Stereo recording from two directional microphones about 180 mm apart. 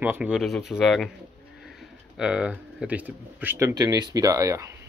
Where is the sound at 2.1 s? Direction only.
5° right (ahead or behind).